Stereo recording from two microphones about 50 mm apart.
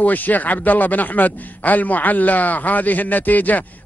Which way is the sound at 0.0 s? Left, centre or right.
Left.